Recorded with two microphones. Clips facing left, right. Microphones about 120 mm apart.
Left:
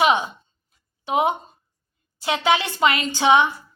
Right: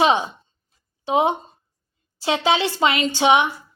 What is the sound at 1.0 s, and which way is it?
A woman's voice, 30° right (ahead or behind).